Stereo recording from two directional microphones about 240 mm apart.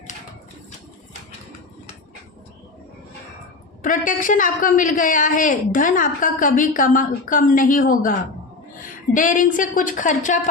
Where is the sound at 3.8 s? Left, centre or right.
Left.